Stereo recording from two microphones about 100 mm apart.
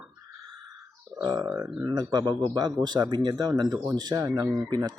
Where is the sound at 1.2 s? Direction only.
40° right (ahead or behind).